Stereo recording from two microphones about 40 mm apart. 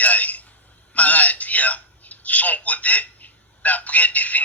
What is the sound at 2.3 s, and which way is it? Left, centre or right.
Telephone, left.